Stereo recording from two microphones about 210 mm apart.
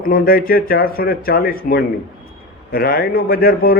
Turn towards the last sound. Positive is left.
turn(degrees=45)  # may be behind; listen again after turning